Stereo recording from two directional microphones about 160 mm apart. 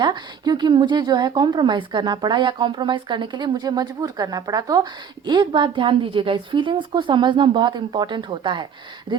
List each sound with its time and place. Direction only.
0.0 s a woman's voice: 25° right (ahead or behind)